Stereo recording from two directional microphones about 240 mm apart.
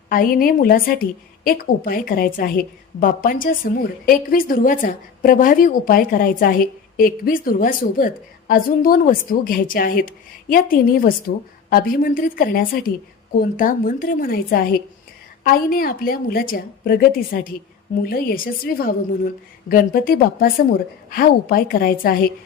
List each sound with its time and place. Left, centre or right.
0.1 s a woman's voice: left